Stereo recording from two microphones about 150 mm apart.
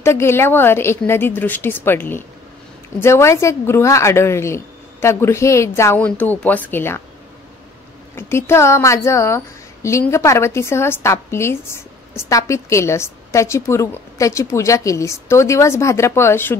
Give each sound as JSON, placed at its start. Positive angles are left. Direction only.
{"t": 0.0, "sound": "a woman's voice", "side_deg": 15}
{"t": 8.2, "sound": "a woman's voice", "side_deg": 15}